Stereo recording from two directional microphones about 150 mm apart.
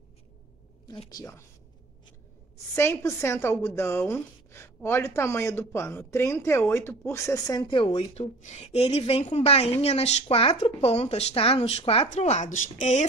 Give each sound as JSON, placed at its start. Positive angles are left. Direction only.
{"t": 1.1, "sound": "speech", "side_deg": 20}
{"t": 2.7, "sound": "speech", "side_deg": 15}
{"t": 7.6, "sound": "a woman's voice", "side_deg": 40}